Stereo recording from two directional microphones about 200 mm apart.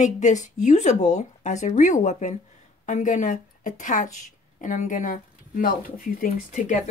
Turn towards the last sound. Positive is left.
turn(degrees=40)  # may be behind; listen again after turning